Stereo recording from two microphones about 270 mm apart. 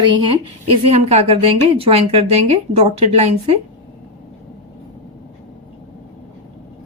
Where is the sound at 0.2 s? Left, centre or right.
Centre.